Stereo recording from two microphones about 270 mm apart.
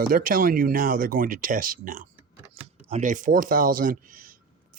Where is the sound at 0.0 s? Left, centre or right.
Right.